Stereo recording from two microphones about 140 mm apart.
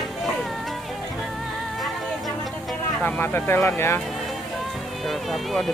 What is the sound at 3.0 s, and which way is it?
Speech, 15° left (ahead or behind).